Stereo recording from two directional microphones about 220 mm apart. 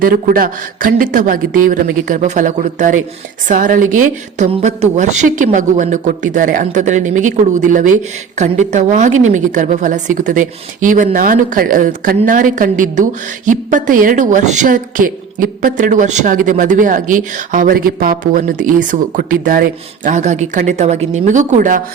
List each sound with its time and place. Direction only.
0.0 s a woman's voice: 40° right (ahead or behind)